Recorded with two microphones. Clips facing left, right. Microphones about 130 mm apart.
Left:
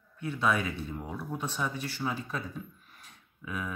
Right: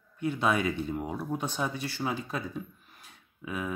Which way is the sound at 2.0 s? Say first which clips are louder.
Right 2 dB; 20° right (ahead or behind).